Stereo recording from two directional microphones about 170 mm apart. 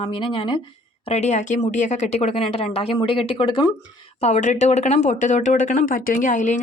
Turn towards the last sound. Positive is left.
turn(degrees=45)  # may be behind; listen again after turning